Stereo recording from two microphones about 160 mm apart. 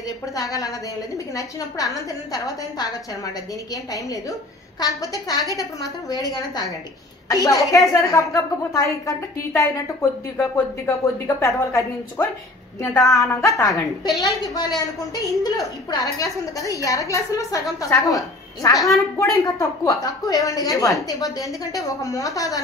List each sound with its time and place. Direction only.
0.4 s a woman's voice: 20° left (ahead or behind)
10.3 s a woman's voice: 20° left (ahead or behind)